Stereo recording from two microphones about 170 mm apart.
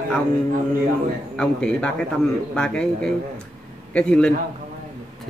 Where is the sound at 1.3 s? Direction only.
5° left (ahead or behind).